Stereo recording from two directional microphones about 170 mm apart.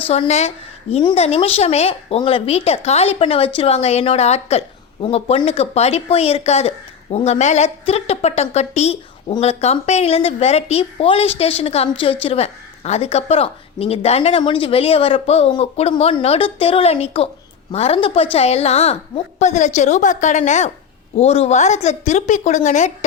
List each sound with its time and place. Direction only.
0.1 s a woman's voice: 40° left (ahead or behind)